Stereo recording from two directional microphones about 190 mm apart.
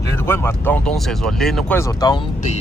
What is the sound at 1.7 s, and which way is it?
Speech, 20° left (ahead or behind).